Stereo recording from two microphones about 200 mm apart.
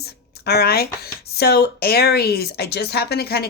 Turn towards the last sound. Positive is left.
turn(degrees=55)  # may be behind; listen again after turning